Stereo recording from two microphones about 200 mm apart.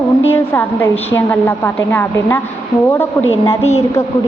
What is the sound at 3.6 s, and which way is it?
Speech, 30° left (ahead or behind).